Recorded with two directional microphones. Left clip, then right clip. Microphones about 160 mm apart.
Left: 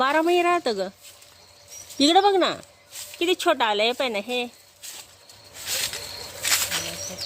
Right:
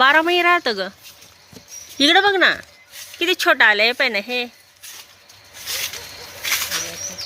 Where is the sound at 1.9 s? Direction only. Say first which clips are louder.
Right 3 dB; 5° left (ahead or behind).